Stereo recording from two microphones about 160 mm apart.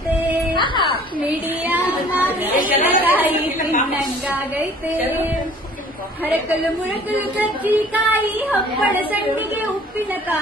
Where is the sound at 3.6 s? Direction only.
55° left (ahead or behind).